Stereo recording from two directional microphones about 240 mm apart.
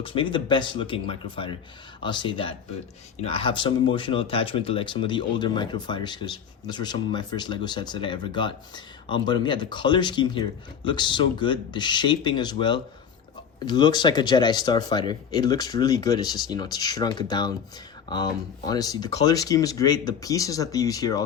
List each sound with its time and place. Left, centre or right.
0.0 s speech: left